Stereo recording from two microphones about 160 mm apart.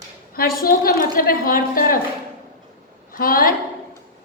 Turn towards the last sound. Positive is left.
turn(degrees=60)  # may be behind; listen again after turning